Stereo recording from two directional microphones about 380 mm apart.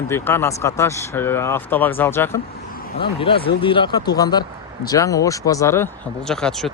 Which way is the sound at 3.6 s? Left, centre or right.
Centre.